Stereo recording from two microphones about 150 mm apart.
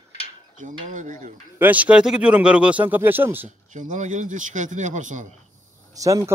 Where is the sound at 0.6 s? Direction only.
60° right (ahead or behind).